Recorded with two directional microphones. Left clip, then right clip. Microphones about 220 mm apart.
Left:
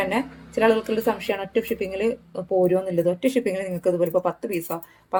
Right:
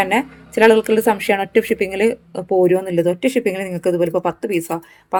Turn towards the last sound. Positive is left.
turn(degrees=-30)  # may be behind; listen again after turning